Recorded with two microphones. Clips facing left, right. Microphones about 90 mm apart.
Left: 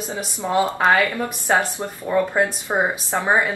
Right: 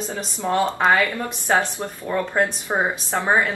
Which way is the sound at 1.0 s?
15° left (ahead or behind).